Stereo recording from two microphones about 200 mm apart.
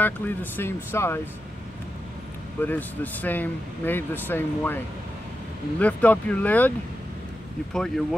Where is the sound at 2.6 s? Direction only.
10° left (ahead or behind).